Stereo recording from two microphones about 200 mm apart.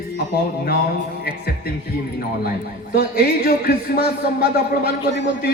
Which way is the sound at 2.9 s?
50° left (ahead or behind).